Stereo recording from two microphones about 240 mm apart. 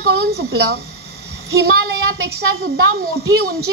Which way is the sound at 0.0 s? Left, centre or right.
Right.